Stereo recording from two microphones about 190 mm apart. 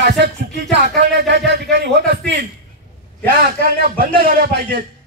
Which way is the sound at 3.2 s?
50° right (ahead or behind).